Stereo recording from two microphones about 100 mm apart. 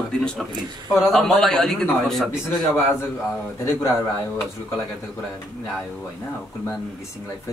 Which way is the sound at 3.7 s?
25° left (ahead or behind).